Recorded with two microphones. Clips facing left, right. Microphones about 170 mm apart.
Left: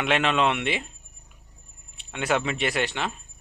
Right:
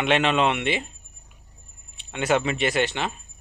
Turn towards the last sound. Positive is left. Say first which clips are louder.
# right 3 dB
turn(degrees=0)  # may be behind; listen again after turning